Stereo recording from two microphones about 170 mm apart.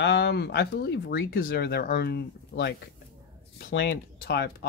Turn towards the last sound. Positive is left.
turn(degrees=75)  # may be behind; listen again after turning